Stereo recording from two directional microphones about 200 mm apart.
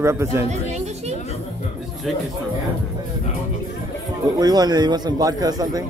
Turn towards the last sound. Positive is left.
turn(degrees=-20)  # may be behind; listen again after turning